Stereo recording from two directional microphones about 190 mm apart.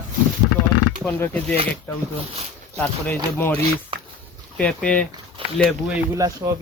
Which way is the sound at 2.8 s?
10° left (ahead or behind).